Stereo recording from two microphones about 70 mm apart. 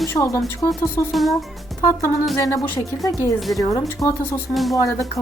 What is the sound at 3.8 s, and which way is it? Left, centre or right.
Speech, left.